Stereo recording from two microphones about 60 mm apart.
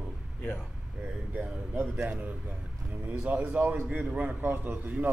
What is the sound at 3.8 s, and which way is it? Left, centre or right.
A man's voice, right.